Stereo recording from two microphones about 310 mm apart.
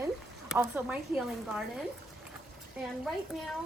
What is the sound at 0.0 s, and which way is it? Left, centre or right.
Speech, centre.